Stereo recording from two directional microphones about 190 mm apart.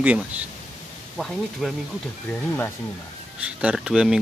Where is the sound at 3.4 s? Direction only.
5° right (ahead or behind).